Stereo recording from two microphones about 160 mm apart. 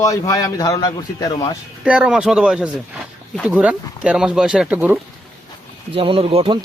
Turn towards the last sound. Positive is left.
turn(degrees=-35)  # may be behind; listen again after turning